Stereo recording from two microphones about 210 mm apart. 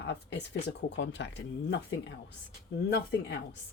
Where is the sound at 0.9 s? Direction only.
60° left (ahead or behind).